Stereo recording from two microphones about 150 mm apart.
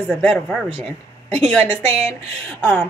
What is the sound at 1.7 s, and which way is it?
Speech, 45° right (ahead or behind).